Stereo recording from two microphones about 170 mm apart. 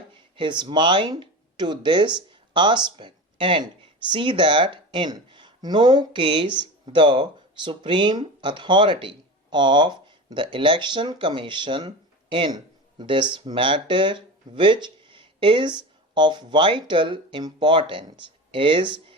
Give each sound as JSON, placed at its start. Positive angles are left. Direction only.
{"t": 0.1, "sound": "speech", "side_deg": -30}